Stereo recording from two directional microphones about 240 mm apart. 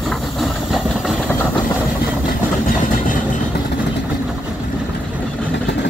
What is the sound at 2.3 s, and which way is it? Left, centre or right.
Vehicle, left.